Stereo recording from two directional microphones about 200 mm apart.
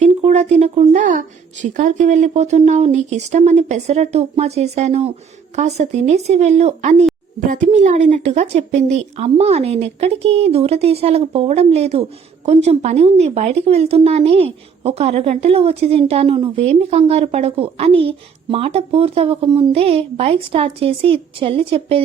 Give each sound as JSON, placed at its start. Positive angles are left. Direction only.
{"t": 0.0, "sound": "a woman's voice", "side_deg": -35}